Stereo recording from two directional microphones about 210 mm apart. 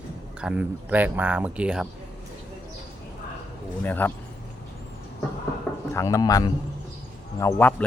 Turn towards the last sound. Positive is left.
turn(degrees=10)  # may be behind; listen again after turning